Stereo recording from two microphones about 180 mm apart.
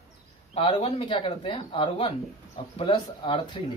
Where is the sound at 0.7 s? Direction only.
30° left (ahead or behind).